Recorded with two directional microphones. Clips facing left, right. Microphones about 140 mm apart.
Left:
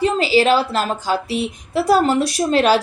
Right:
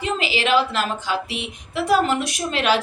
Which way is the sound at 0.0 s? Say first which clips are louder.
Left 8 dB; 35° left (ahead or behind).